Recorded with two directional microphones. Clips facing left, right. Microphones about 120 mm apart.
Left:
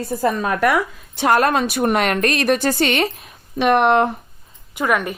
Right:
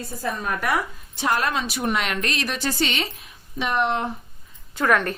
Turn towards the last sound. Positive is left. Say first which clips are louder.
# left 1 dB
turn(degrees=10)  # may be behind; listen again after turning